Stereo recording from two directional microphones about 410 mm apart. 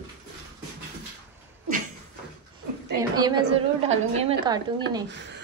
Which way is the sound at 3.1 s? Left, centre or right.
Centre.